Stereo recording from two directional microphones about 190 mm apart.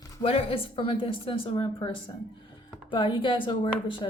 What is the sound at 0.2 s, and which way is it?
A woman's voice, 30° left (ahead or behind).